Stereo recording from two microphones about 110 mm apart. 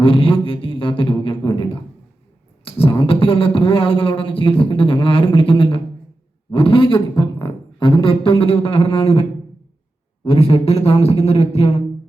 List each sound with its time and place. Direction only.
0.0 s a sound: 55° left (ahead or behind)
2.6 s beatboxing: 55° left (ahead or behind)
6.5 s a man's voice: 55° left (ahead or behind)
10.2 s a man's voice: 65° left (ahead or behind)